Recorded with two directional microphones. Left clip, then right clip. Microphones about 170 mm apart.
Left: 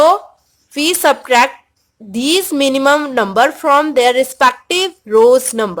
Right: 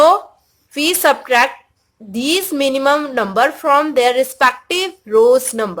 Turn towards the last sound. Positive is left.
turn(degrees=30)  # may be behind; listen again after turning